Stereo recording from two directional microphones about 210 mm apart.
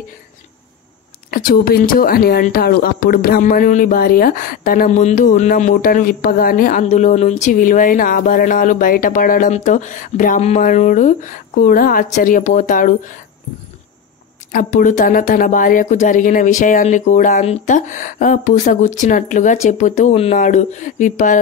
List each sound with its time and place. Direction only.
1.3 s speech: 45° left (ahead or behind)
14.5 s speech: 40° left (ahead or behind)